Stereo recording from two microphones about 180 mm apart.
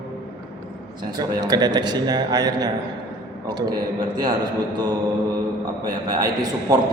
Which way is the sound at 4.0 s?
20° right (ahead or behind).